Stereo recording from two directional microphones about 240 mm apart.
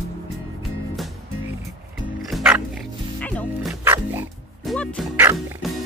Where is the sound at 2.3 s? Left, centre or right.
Centre.